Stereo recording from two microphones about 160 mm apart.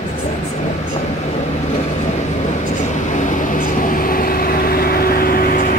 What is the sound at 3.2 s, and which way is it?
Vehicle, 55° left (ahead or behind).